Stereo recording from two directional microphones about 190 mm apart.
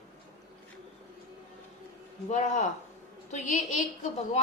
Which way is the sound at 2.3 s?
40° left (ahead or behind).